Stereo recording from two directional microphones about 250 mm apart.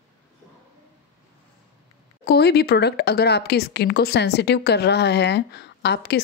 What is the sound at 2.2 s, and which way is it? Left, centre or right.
Speech, left.